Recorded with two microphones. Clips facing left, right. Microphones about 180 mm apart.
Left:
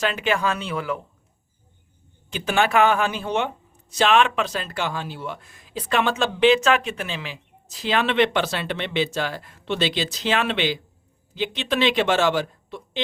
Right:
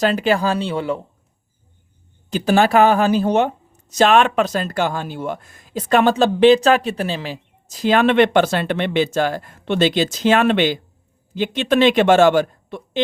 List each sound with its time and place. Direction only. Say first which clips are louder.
0.0 s speech: right 6 dB; 35° right (ahead or behind)
2.3 s speech: right 6 dB; 35° right (ahead or behind)